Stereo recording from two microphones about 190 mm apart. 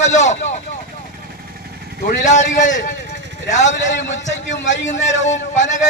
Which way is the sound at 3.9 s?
75° left (ahead or behind).